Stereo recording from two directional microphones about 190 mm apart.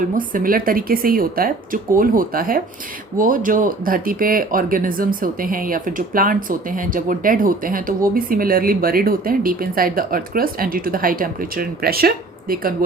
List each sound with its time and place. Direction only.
0.1 s speech: 45° right (ahead or behind)